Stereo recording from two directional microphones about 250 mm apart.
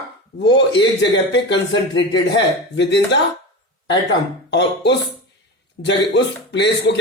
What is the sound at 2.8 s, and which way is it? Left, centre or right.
Speech, left.